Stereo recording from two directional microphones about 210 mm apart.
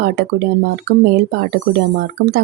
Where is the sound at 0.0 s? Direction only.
50° right (ahead or behind).